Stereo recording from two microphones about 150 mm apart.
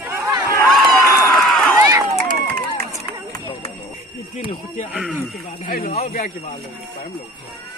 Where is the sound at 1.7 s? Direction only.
25° right (ahead or behind).